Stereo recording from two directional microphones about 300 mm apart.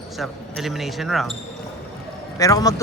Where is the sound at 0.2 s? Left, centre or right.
Centre.